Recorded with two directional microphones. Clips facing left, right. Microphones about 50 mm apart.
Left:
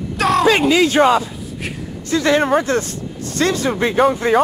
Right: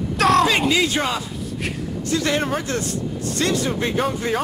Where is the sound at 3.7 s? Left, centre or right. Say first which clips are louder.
Left 6 dB; left.